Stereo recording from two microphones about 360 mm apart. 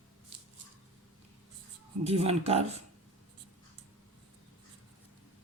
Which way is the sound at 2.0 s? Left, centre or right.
Centre.